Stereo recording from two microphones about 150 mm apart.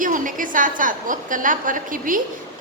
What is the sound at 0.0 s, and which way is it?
A woman's voice, 60° right (ahead or behind).